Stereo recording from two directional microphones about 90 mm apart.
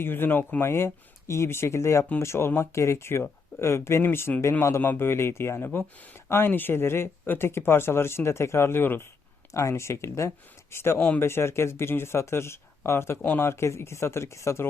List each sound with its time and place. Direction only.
0.0 s speech: 25° left (ahead or behind)
9.5 s speech: 35° left (ahead or behind)